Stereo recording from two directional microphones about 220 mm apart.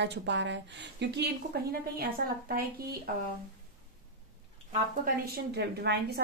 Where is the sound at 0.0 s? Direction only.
55° right (ahead or behind).